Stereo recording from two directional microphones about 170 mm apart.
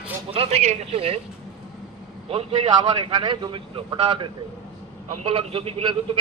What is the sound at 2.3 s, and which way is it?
A man's voice, 35° right (ahead or behind).